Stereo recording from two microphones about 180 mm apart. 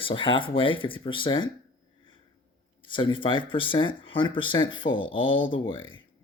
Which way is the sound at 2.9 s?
25° left (ahead or behind).